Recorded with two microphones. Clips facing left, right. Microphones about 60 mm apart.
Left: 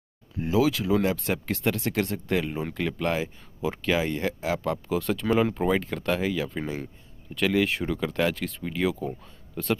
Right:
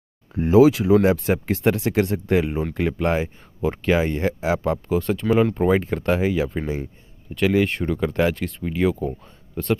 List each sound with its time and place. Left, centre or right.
0.3 s speech: right
0.7 s speech: centre
4.8 s speech: centre
5.7 s speech: centre